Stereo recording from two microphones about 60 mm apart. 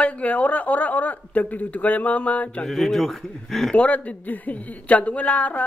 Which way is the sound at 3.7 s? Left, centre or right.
Left.